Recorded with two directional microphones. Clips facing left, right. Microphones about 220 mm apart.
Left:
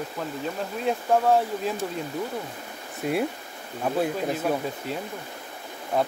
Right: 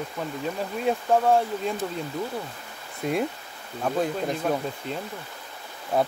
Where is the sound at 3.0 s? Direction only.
5° left (ahead or behind).